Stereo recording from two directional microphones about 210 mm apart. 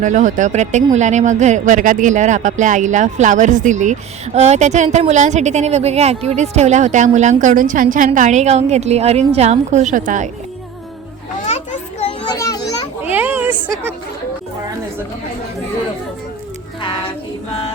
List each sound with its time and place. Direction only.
0.0 s a woman's voice: 35° right (ahead or behind)
12.2 s children playing: 15° left (ahead or behind)
13.1 s a sound: 10° right (ahead or behind)